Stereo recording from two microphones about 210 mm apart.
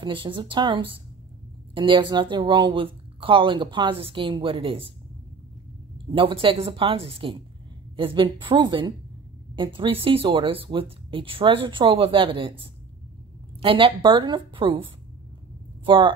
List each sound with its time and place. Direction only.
0.0 s speech: 25° right (ahead or behind)
6.1 s speech: 25° right (ahead or behind)